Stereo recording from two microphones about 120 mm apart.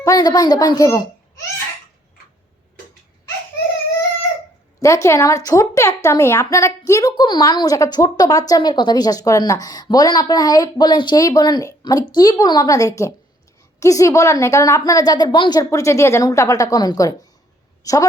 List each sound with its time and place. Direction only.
0.0 s a woman's voice: 30° left (ahead or behind)
4.8 s a woman's voice: 25° left (ahead or behind)